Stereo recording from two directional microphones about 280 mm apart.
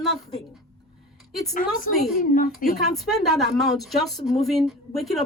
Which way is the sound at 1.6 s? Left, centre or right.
Left.